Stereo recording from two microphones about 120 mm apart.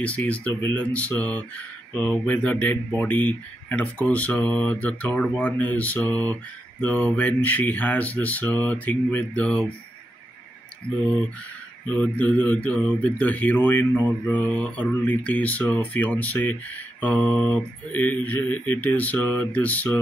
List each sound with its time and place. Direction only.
0.0 s speech: 10° left (ahead or behind)
11.9 s speech: 10° left (ahead or behind)